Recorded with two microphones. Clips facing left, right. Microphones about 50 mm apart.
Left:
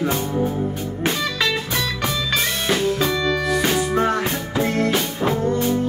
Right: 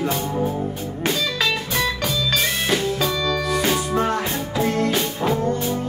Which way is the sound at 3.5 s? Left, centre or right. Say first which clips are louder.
Even; centre.